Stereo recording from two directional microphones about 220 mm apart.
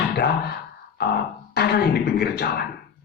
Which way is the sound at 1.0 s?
45° left (ahead or behind).